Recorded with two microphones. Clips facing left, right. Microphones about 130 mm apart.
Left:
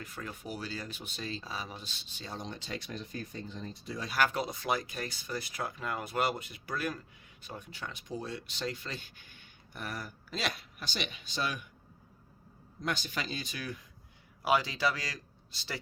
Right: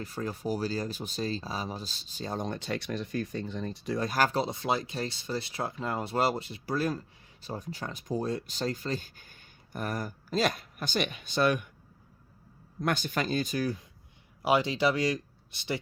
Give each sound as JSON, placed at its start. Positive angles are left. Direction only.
{"t": 0.0, "sound": "speech", "side_deg": -35}
{"t": 4.0, "sound": "speech", "side_deg": -40}
{"t": 12.8, "sound": "speech", "side_deg": -55}
{"t": 14.4, "sound": "speech", "side_deg": -25}